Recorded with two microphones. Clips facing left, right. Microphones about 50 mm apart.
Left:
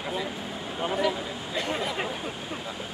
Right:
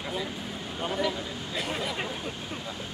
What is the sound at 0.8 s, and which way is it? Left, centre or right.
Speech, centre.